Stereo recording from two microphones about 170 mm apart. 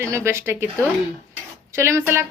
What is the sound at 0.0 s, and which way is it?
A woman's voice, 15° right (ahead or behind).